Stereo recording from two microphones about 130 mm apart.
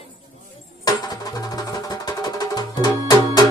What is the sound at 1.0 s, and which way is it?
Music, 30° left (ahead or behind).